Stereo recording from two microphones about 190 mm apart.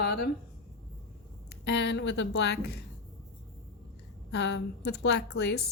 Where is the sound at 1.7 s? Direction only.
70° left (ahead or behind).